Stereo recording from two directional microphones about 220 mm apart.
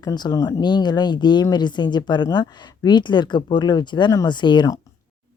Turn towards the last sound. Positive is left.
turn(degrees=20)  # may be behind; listen again after turning